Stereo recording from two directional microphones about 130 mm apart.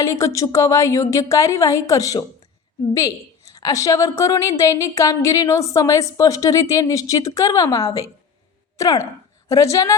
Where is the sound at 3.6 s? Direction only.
25° left (ahead or behind).